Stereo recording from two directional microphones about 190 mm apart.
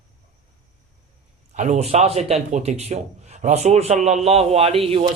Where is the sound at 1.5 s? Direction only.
40° right (ahead or behind).